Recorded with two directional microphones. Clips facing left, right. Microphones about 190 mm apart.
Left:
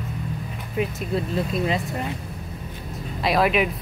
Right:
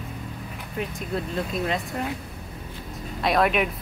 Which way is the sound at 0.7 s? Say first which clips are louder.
Left 4 dB; 5° left (ahead or behind).